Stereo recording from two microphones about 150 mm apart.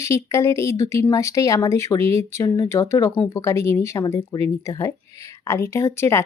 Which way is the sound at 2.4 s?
30° left (ahead or behind).